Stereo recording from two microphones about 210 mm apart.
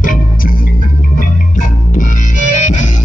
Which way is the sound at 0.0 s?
40° left (ahead or behind).